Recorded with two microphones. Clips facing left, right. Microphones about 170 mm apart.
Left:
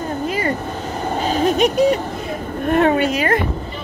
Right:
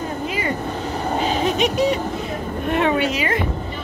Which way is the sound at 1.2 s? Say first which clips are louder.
Left 5 dB; 45° left (ahead or behind).